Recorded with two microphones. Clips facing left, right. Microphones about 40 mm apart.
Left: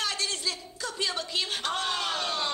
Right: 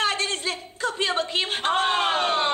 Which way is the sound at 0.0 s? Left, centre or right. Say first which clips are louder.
Right 6 dB; right.